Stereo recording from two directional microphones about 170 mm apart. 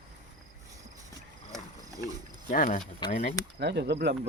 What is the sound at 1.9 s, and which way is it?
Wild animals, 20° right (ahead or behind).